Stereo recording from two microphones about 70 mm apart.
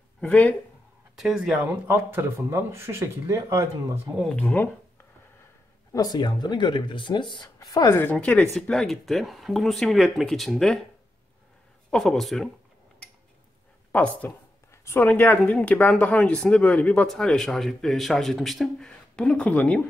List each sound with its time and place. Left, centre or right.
0.2 s speech: left
1.1 s speech: centre
1.7 s speech: right
5.9 s speech: left
7.6 s speech: left
7.9 s speech: left
8.2 s speech: centre
8.5 s speech: centre
11.9 s speech: centre
13.9 s speech: left
17.1 s speech: centre
18.9 s speech: centre